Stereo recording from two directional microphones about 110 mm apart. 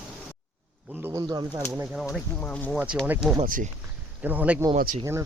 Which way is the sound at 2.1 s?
10° left (ahead or behind).